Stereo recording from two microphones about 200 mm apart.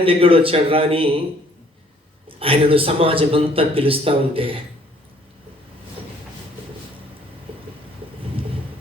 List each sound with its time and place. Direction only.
0.0 s speech: 25° right (ahead or behind)
2.4 s speech: 25° right (ahead or behind)